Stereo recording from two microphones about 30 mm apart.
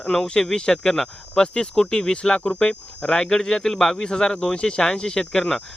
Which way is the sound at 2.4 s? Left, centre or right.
Left.